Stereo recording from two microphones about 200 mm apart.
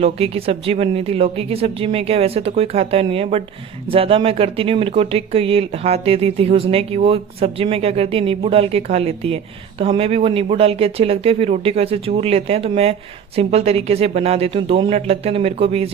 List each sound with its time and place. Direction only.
0.0 s speech: 30° right (ahead or behind)